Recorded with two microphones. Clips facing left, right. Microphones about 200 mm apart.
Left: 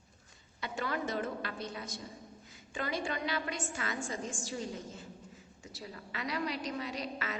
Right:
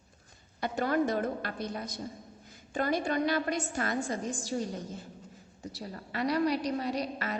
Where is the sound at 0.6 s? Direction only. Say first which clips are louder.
Right 8 dB; 45° right (ahead or behind).